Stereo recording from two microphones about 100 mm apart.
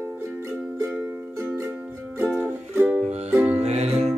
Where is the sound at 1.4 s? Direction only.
25° right (ahead or behind).